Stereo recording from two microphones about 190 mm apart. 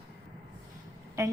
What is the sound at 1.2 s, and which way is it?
Speech, 15° right (ahead or behind).